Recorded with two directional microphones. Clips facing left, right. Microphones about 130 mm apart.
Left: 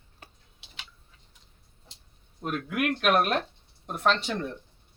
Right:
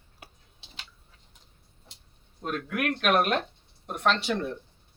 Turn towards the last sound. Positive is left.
turn(degrees=-5)  # may be behind; listen again after turning